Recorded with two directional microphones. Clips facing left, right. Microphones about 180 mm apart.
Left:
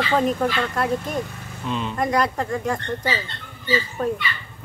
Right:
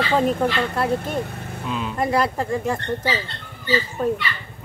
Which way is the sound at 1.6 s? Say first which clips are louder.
Left 1 dB; 5° right (ahead or behind).